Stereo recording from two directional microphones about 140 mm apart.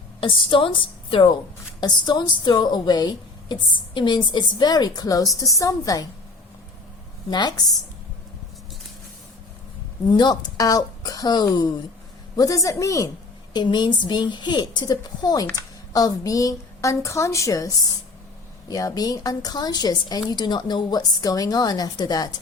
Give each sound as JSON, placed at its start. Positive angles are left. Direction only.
{"t": 0.2, "sound": "a woman's voice", "side_deg": 40}
{"t": 7.3, "sound": "a woman's voice", "side_deg": 30}
{"t": 10.1, "sound": "a woman's voice", "side_deg": 30}